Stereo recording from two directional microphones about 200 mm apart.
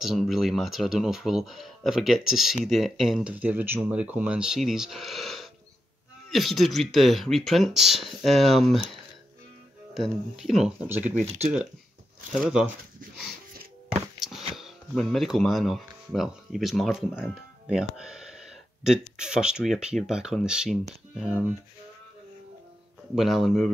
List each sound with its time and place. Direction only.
0.0 s speech: centre (ahead or behind)
9.9 s speech: centre (ahead or behind)
11.2 s speech: 30° right (ahead or behind)
12.4 s speech: 5° right (ahead or behind)
14.5 s speech: centre (ahead or behind)
23.1 s speech: centre (ahead or behind)